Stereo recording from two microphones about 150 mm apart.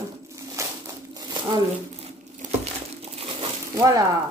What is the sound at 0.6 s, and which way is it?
Crushing, 20° right (ahead or behind).